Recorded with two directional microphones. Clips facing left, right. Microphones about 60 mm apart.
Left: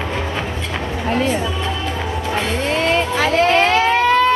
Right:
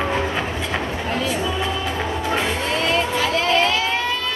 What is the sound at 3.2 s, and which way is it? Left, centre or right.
Vehicle, left.